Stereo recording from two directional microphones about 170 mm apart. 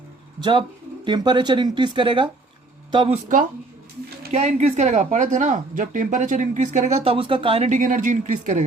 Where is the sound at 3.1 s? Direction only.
50° right (ahead or behind); by 7.7 s 30° right (ahead or behind).